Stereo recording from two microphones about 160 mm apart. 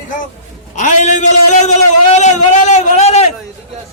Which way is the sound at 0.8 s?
50° left (ahead or behind).